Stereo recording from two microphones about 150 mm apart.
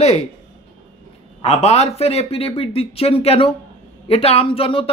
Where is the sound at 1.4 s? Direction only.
45° left (ahead or behind).